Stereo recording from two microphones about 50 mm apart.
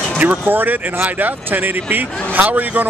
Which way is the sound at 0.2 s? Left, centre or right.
Right.